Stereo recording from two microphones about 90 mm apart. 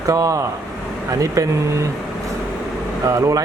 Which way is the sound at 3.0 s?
35° right (ahead or behind).